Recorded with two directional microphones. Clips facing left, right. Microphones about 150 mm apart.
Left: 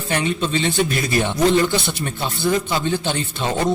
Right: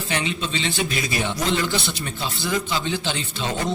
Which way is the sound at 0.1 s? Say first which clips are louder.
Left 6 dB; 50° left (ahead or behind).